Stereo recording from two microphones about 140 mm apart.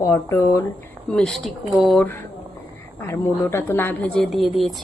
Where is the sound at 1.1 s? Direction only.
5° left (ahead or behind).